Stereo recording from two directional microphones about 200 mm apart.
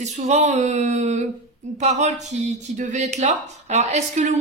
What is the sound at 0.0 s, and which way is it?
Speech, 35° right (ahead or behind).